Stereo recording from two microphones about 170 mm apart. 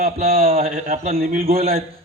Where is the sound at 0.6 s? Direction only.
50° right (ahead or behind).